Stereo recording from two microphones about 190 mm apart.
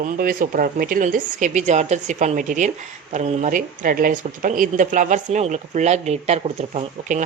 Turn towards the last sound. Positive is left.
turn(degrees=-40)  # may be behind; listen again after turning